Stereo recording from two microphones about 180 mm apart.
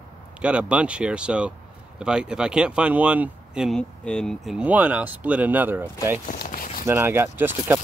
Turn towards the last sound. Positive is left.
turn(degrees=-10)  # may be behind; listen again after turning